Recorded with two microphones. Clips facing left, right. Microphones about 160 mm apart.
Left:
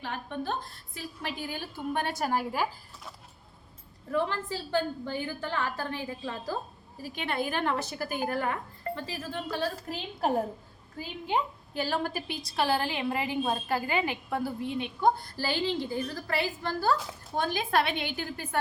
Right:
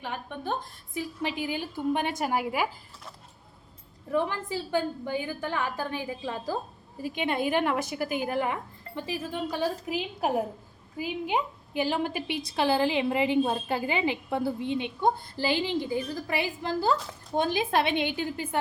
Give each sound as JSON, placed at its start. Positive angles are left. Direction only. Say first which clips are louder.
{"t": 0.0, "sound": "a woman's voice", "louder": "even", "side_deg": -15}
{"t": 4.1, "sound": "a woman's voice", "louder": "right 2 dB", "side_deg": -15}